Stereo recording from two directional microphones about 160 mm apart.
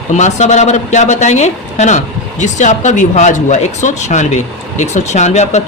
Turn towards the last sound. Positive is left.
turn(degrees=45)  # may be behind; listen again after turning